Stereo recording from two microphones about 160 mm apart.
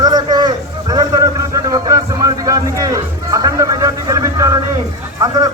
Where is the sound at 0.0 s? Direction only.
25° right (ahead or behind).